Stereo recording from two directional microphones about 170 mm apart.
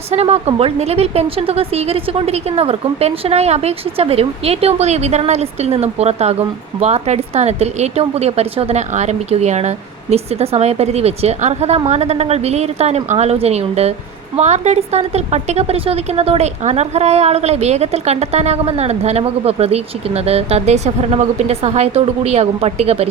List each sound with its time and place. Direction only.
0.1 s a woman's voice: 40° right (ahead or behind)